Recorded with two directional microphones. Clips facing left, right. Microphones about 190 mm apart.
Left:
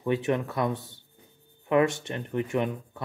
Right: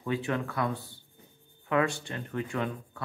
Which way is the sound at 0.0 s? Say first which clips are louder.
Left 5 dB; 20° left (ahead or behind).